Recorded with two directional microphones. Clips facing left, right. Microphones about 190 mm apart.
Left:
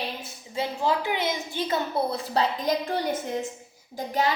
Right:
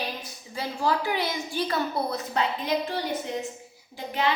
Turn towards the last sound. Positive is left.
turn(degrees=40)  # may be behind; listen again after turning